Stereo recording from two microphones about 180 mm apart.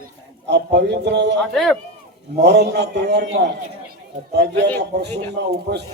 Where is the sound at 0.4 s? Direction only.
75° right (ahead or behind).